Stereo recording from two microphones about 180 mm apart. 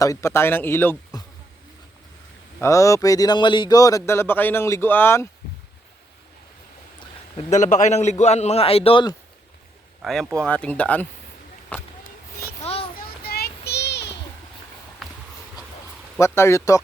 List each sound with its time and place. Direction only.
0.0 s a man's voice: 15° left (ahead or behind)
2.6 s a man's voice: 15° left (ahead or behind)
7.3 s a man's voice: 40° left (ahead or behind)
10.0 s a man's voice: centre (ahead or behind)
12.7 s a sound: 35° left (ahead or behind)
13.0 s child singing: 60° left (ahead or behind)
15.0 s a sound: centre (ahead or behind)
16.2 s a man's voice: 15° left (ahead or behind)